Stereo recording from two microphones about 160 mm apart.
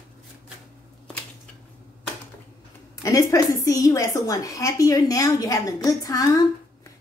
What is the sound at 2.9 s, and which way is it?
A woman's voice, 20° left (ahead or behind).